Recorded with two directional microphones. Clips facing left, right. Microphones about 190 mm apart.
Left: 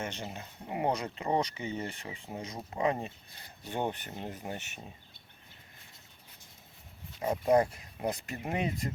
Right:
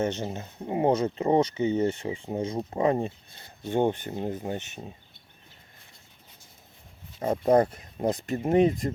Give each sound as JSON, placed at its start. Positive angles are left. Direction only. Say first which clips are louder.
{"t": 0.0, "sound": "speech", "louder": "right 10 dB", "side_deg": -35}
{"t": 3.6, "sound": "speech", "louder": "right 9 dB", "side_deg": -20}
{"t": 7.2, "sound": "speech", "louder": "right 4 dB", "side_deg": -40}